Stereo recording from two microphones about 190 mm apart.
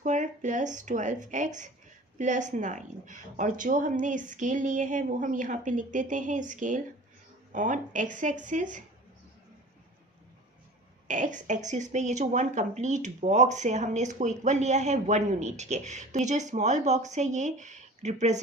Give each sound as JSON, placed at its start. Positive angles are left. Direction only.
{"t": 0.0, "sound": "speech", "side_deg": -40}
{"t": 11.1, "sound": "speech", "side_deg": -40}